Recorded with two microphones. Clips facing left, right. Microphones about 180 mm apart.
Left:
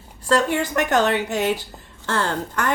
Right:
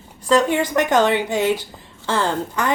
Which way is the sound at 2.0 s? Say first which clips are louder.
Right 3 dB; 10° right (ahead or behind).